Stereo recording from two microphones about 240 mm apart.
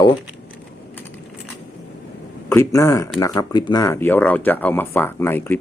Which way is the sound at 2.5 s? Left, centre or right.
Centre.